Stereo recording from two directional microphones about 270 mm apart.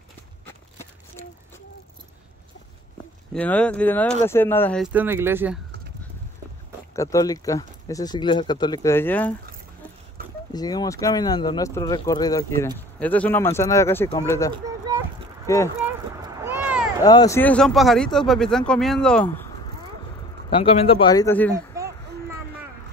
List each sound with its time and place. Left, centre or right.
3.3 s speech: centre
4.8 s speech: centre
7.0 s speech: centre
10.5 s speech: centre
14.5 s a sound: centre
15.4 s speech: centre
16.4 s a sound: centre
17.0 s speech: centre
20.4 s speech: centre
21.5 s a sound: centre